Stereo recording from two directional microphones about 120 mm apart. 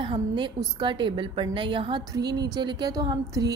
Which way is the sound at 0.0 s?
40° right (ahead or behind).